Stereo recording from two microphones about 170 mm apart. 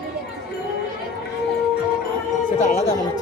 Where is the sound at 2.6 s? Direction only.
45° left (ahead or behind).